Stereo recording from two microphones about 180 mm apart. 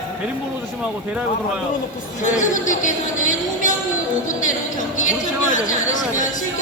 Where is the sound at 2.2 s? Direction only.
45° left (ahead or behind).